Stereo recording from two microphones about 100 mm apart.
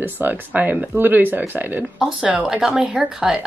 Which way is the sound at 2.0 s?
5° right (ahead or behind).